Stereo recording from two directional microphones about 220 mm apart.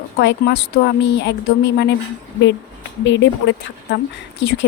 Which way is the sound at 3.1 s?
55° left (ahead or behind).